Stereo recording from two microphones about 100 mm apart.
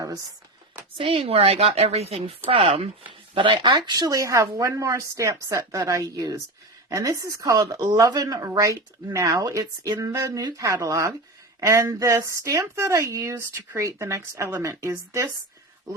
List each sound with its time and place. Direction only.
0.9 s speech: 65° right (ahead or behind)
3.1 s speech: 55° right (ahead or behind)
3.8 s a woman's voice: 40° right (ahead or behind)